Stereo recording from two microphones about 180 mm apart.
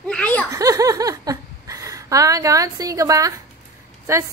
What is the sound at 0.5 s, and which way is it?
Speech, 20° right (ahead or behind).